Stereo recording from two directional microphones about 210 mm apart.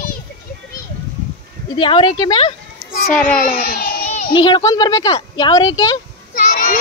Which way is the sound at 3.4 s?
40° left (ahead or behind).